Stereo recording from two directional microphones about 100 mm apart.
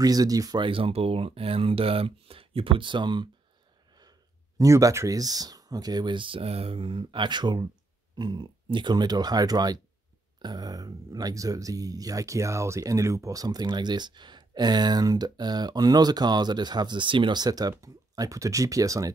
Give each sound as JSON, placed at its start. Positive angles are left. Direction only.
{"t": 0.0, "sound": "speech", "side_deg": -40}
{"t": 0.6, "sound": "speech", "side_deg": -60}
{"t": 4.6, "sound": "speech", "side_deg": -35}